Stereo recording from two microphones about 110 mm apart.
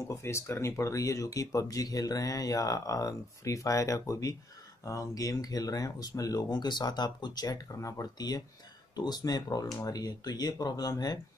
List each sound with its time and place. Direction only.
0.2 s speech: 25° left (ahead or behind)